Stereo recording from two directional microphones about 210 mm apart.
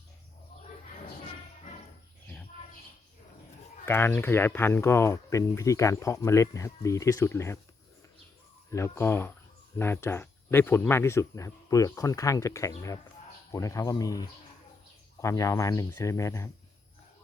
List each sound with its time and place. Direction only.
3.8 s speech: 10° left (ahead or behind)
8.7 s speech: 10° left (ahead or behind)